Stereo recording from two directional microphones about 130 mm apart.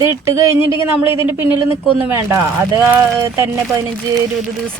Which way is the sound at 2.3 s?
20° right (ahead or behind).